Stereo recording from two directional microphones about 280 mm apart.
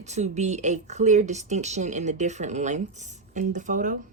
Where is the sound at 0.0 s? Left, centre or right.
Right.